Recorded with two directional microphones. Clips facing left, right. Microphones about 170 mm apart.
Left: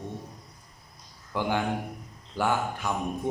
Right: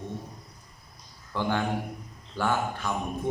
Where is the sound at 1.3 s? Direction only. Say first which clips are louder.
Even; 15° left (ahead or behind).